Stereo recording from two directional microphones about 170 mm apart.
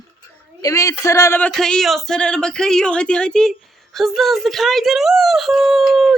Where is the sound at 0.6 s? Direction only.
20° left (ahead or behind).